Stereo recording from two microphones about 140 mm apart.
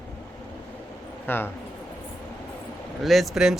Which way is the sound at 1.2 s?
15° left (ahead or behind).